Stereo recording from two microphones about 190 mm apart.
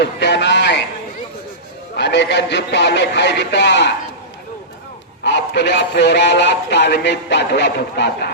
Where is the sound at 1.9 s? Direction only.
65° left (ahead or behind).